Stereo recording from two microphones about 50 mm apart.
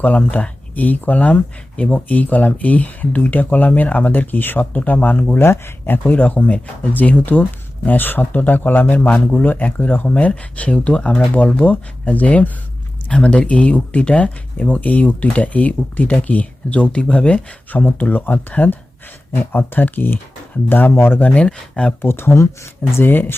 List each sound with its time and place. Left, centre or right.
0.2 s speech: left
5.4 s speech: left
16.8 s speech: centre
17.7 s speech: left
19.3 s speech: left
20.9 s speech: left
21.2 s speech: left
22.0 s speech: left
23.0 s speech: left